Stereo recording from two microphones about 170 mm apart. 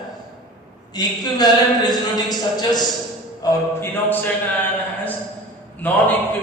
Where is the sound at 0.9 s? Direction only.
25° left (ahead or behind).